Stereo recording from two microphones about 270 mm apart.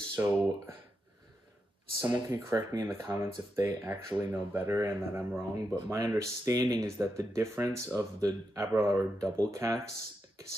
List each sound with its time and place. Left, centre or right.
0.1 s speech: centre
2.0 s speech: centre